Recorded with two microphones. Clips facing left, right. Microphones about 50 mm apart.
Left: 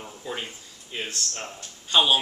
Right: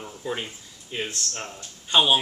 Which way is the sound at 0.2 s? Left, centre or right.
Centre.